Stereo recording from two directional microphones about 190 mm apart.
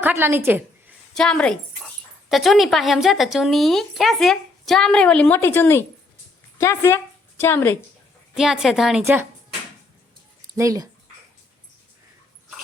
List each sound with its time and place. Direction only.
0.0 s a woman's voice: 10° right (ahead or behind)
1.1 s a woman's voice: 5° left (ahead or behind)
8.4 s speech: centre (ahead or behind)
10.4 s speech: 20° right (ahead or behind)